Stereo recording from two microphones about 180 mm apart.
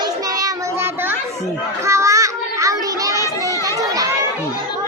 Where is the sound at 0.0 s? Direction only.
20° right (ahead or behind).